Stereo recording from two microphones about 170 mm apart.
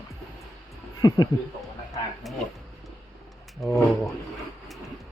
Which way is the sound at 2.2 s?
Centre (ahead or behind).